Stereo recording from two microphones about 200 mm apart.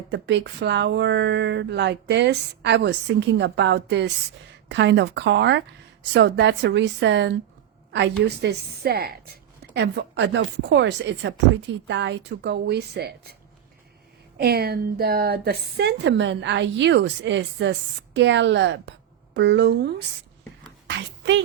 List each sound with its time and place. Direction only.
0.1 s a woman's voice: 60° right (ahead or behind)
14.3 s a woman's voice: 50° right (ahead or behind)
20.8 s a sound: 60° right (ahead or behind)